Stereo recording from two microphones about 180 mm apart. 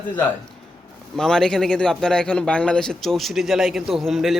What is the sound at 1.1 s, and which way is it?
A man's voice, 5° left (ahead or behind).